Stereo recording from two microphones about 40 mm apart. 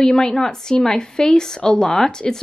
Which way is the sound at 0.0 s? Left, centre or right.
Centre.